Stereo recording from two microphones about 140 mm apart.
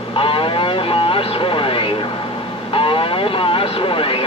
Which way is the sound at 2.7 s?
40° left (ahead or behind).